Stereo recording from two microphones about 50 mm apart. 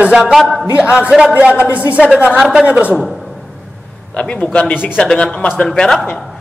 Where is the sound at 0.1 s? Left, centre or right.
Centre.